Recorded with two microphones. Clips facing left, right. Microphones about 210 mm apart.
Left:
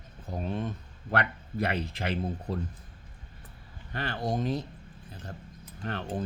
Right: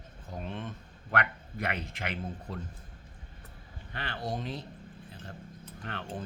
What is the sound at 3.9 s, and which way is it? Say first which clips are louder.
Speech: left 5 dB; 45° left (ahead or behind).